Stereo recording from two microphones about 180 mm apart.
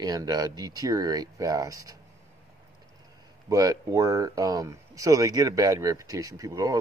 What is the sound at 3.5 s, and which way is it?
Speech, 20° right (ahead or behind).